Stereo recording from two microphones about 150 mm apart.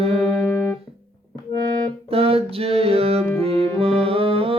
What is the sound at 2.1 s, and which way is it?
Music, 40° right (ahead or behind).